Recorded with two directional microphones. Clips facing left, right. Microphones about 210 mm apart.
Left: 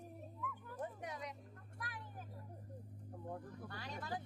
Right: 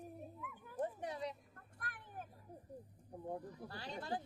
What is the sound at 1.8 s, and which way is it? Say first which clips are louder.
Vehicle: right 1 dB; 55° right (ahead or behind).